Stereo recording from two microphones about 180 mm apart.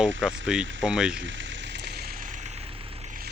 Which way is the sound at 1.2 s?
90° right.